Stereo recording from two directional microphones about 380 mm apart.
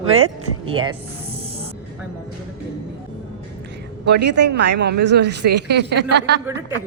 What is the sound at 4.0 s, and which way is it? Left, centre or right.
Speech, right.